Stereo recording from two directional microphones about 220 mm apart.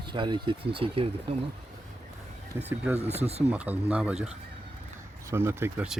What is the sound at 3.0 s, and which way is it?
Speech, 30° right (ahead or behind).